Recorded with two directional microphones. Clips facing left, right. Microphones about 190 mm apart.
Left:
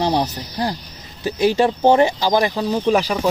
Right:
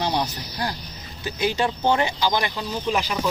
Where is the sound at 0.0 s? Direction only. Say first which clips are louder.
Left 5 dB; 30° left (ahead or behind).